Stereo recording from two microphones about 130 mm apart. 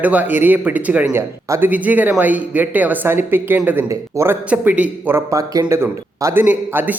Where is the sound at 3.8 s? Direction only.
20° right (ahead or behind).